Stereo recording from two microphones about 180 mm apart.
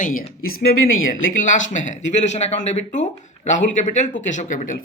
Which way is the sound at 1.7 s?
40° left (ahead or behind).